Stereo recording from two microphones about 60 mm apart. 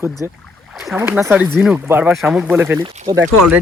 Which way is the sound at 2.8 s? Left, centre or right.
Right.